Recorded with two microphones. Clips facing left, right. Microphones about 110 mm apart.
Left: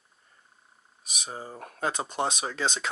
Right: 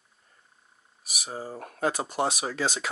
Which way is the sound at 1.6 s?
20° left (ahead or behind).